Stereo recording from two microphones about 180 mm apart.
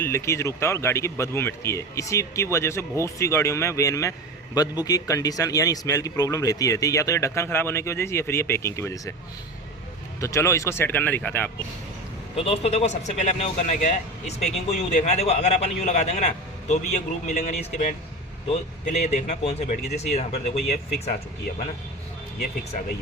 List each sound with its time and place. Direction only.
0.0 s a man's voice: 15° left (ahead or behind)
10.2 s a man's voice: 15° left (ahead or behind)
12.4 s a man's voice: 35° left (ahead or behind)